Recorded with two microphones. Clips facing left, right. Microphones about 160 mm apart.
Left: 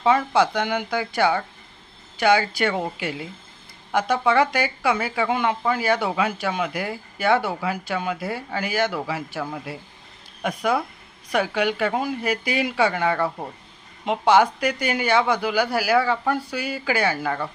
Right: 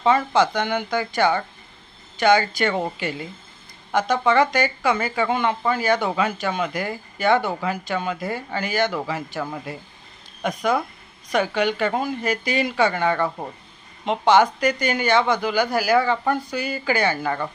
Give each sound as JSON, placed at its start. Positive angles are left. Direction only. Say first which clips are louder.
{"t": 0.3, "sound": "speech", "louder": "right 1 dB", "side_deg": 10}